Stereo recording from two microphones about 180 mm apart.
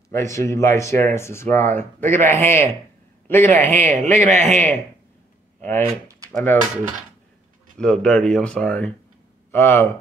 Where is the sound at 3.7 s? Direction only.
40° right (ahead or behind).